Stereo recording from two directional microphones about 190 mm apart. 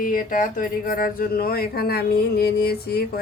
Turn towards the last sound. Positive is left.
turn(degrees=55)  # may be behind; listen again after turning